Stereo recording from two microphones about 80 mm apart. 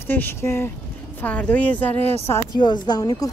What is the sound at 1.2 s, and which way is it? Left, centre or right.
Speech, centre.